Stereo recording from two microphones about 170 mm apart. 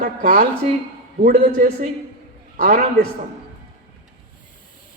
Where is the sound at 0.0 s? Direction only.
55° right (ahead or behind).